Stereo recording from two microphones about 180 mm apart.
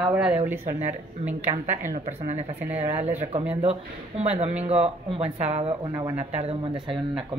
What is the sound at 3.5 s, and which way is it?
Speech, 35° right (ahead or behind).